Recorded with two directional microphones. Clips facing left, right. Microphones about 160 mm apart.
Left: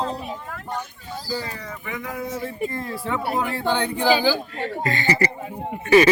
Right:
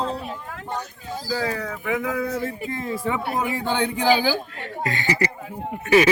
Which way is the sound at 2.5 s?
Centre (ahead or behind).